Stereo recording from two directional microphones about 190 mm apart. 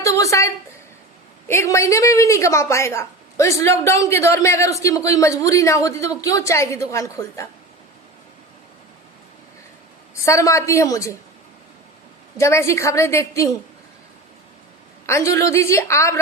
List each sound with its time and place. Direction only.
0.0 s a sound: 15° left (ahead or behind)
1.5 s a woman's voice: 15° left (ahead or behind)
10.2 s a woman's voice: 15° left (ahead or behind)
12.4 s a woman's voice: 15° left (ahead or behind)
15.0 s a woman's voice: 15° left (ahead or behind)